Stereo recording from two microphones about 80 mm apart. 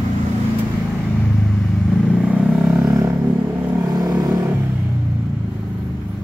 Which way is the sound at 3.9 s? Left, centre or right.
Right.